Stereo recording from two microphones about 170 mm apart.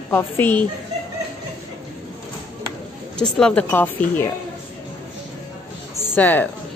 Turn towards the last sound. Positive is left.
turn(degrees=10)  # may be behind; listen again after turning